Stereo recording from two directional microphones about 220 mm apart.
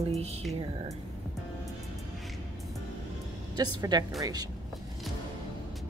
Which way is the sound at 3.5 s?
20° right (ahead or behind).